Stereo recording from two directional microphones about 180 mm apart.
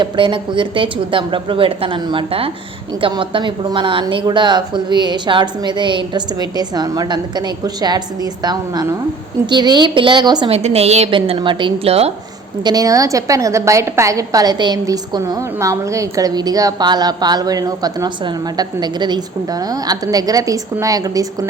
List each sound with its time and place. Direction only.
0.0 s a woman's voice: 25° right (ahead or behind)
10.5 s a woman's voice: 35° right (ahead or behind)
12.6 s a woman's voice: 20° right (ahead or behind)